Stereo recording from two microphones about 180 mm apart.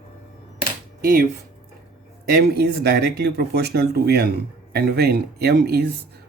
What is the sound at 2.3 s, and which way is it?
Speech, 60° right (ahead or behind).